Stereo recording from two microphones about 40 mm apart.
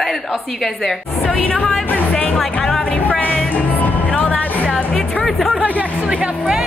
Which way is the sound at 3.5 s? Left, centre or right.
Left.